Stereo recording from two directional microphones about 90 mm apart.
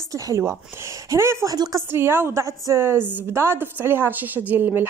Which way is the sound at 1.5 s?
45° right (ahead or behind).